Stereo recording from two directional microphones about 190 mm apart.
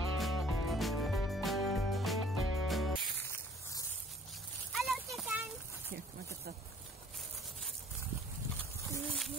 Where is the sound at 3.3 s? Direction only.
15° left (ahead or behind).